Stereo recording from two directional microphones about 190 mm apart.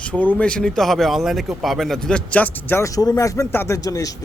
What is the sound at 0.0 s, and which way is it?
Speech, 5° left (ahead or behind).